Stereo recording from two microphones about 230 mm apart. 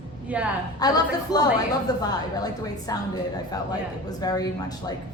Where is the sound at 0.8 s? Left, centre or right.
Centre.